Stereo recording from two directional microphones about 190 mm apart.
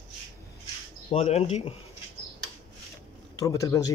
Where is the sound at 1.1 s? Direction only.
35° left (ahead or behind).